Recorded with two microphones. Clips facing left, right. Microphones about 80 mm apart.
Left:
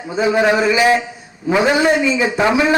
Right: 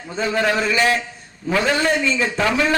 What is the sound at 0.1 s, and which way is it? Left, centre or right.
A man's voice, centre.